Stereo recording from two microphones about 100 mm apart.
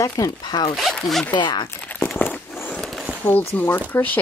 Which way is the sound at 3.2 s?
20° left (ahead or behind).